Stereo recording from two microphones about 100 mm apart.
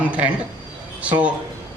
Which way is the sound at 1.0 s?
15° right (ahead or behind).